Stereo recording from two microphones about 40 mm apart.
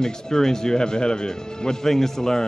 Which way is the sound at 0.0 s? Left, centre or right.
Centre.